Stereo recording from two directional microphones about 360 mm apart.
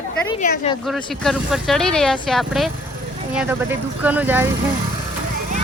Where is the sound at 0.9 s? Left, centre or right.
Centre.